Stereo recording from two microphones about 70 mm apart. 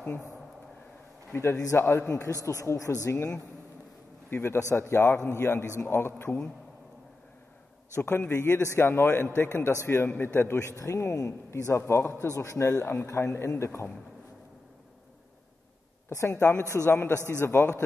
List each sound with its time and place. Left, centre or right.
1.3 s a man's voice: left
4.3 s a man's voice: left
7.9 s a man's voice: left
10.7 s a man's voice: left
16.1 s a man's voice: left
17.4 s a man's voice: left